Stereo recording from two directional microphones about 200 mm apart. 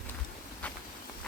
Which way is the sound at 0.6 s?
5° left (ahead or behind).